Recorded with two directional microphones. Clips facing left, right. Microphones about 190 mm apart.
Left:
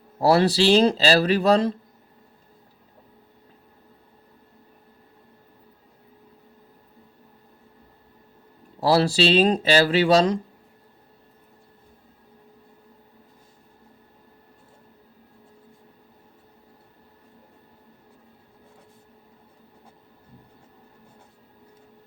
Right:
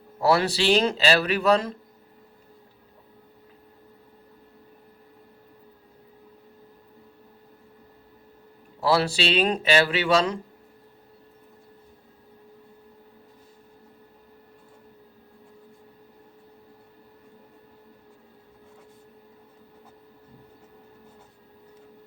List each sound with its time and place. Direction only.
0.2 s speech: 35° left (ahead or behind)
8.8 s speech: 35° left (ahead or behind)